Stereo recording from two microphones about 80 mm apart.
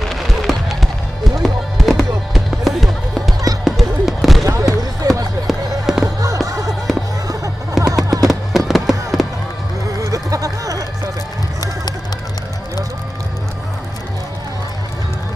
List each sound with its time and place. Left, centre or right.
0.0 s fireworks: centre
1.4 s music: centre
3.6 s fireworks: centre
4.5 s run: right
5.5 s fireworks: centre
6.0 s music: right
8.3 s fireworks: centre
10.0 s music: right